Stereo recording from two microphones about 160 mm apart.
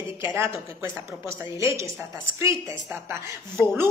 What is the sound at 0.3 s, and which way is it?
A woman's voice, 15° right (ahead or behind).